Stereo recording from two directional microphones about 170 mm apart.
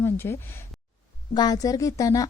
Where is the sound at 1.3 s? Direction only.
25° left (ahead or behind).